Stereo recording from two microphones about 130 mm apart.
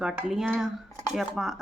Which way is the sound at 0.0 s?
5° right (ahead or behind).